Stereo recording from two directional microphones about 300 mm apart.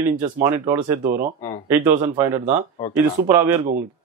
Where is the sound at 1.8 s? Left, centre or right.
Right.